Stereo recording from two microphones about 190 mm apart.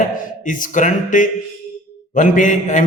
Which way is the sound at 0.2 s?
45° left (ahead or behind).